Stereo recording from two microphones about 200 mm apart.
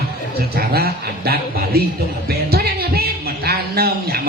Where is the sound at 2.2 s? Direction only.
50° right (ahead or behind).